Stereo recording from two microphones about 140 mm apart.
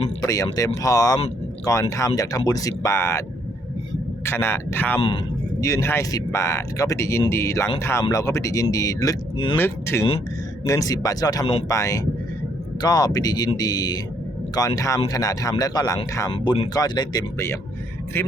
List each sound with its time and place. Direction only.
0.2 s speech: 25° left (ahead or behind)
4.3 s a man's voice: 20° left (ahead or behind)
4.9 s speech: 40° left (ahead or behind)
5.5 s a man's voice: 20° left (ahead or behind)